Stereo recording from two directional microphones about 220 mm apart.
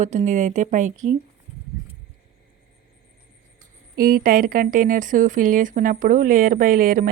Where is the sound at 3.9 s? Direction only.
40° right (ahead or behind).